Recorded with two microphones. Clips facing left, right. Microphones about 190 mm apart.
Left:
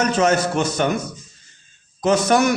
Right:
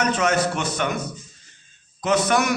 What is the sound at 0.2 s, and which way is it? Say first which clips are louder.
Speech: left 4 dB; 35° left (ahead or behind).